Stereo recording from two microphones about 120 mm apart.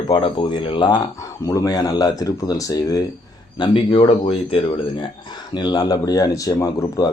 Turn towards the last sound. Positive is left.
turn(degrees=30)  # may be behind; listen again after turning